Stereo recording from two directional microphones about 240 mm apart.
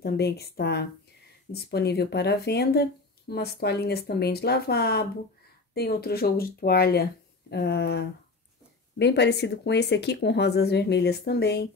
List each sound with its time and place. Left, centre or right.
0.0 s speech: left